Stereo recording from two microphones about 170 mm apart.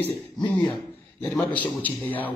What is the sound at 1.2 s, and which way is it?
A man's voice, 5° left (ahead or behind).